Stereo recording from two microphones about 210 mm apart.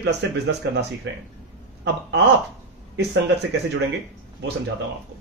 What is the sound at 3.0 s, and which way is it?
Speech, 55° right (ahead or behind).